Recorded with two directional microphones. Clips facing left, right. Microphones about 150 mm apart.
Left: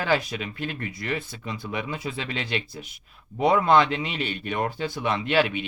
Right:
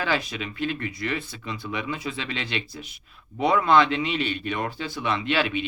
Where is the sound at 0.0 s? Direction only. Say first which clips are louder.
Left 2 dB; 45° left (ahead or behind).